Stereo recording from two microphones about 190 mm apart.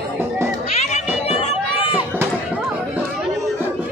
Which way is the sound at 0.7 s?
35° left (ahead or behind).